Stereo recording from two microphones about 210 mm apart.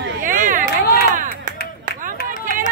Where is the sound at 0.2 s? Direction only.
40° right (ahead or behind).